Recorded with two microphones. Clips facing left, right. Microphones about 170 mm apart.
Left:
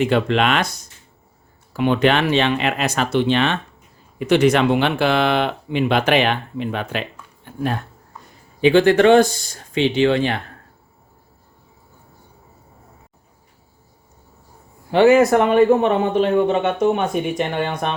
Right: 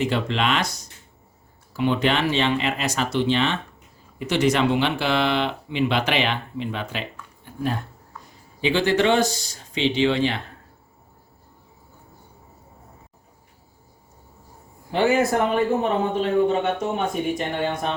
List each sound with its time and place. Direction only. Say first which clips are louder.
0.0 s speech: left 6 dB; 60° left (ahead or behind)
7.4 s a sound: left 3 dB; 65° left (ahead or behind)
8.6 s speech: left 7 dB; 55° left (ahead or behind)
14.9 s a man's voice: left 7 dB; 85° left